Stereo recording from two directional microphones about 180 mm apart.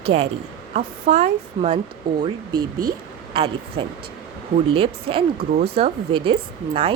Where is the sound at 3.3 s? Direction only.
30° right (ahead or behind).